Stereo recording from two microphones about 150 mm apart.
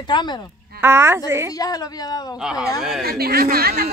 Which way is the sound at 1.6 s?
25° left (ahead or behind).